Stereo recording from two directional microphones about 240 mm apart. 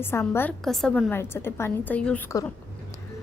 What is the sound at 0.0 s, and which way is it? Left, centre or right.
A woman's voice, centre.